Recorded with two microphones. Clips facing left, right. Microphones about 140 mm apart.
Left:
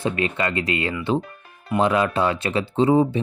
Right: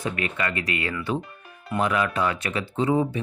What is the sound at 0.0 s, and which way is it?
Speech, 30° left (ahead or behind).